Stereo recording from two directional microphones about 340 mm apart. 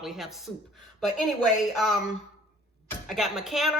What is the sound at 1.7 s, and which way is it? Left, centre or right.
Speech, centre.